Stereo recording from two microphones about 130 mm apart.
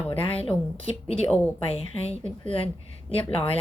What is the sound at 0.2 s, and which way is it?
Speech, 45° left (ahead or behind).